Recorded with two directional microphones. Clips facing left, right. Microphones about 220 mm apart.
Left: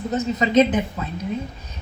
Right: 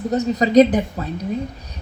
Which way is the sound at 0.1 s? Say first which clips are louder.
Right 4 dB; 40° right (ahead or behind).